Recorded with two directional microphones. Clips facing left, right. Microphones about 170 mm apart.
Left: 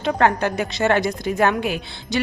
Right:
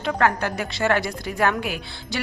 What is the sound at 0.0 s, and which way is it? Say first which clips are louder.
A woman's voice: left 3 dB; 25° left (ahead or behind).